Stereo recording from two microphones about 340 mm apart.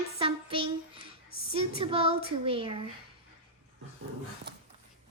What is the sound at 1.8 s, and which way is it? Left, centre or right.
Speech, centre.